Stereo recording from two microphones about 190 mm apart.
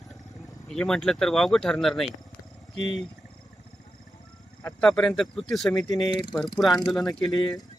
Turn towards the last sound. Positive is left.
turn(degrees=20)  # may be behind; listen again after turning